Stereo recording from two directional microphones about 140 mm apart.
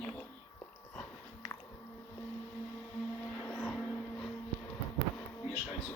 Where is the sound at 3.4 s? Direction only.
15° left (ahead or behind).